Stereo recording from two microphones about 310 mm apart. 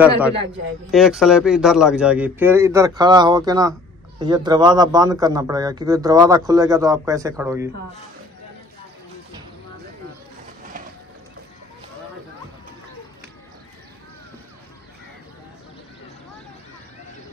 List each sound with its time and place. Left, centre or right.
0.9 s a man's voice: centre